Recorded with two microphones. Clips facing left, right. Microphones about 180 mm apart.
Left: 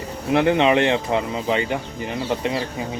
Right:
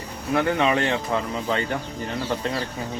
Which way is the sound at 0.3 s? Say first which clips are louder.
Left 4 dB; 20° left (ahead or behind).